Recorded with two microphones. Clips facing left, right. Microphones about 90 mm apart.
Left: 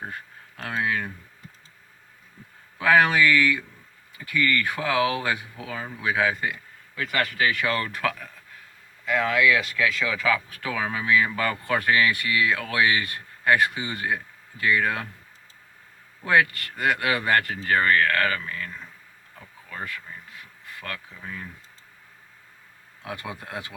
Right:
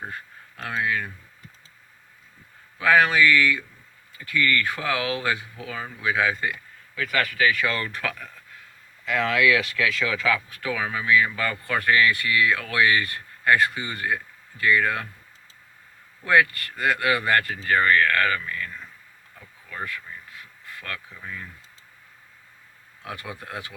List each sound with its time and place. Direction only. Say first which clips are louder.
0.6 s speech: even; 25° left (ahead or behind)
2.7 s speech: even; 25° left (ahead or behind)
5.5 s speech: even; 30° left (ahead or behind); by 10.4 s 15° left (ahead or behind)
10.6 s speech: even; 25° left (ahead or behind)
16.2 s speech: right 1 dB; 25° left (ahead or behind)
23.0 s speech: left 1 dB; 25° left (ahead or behind)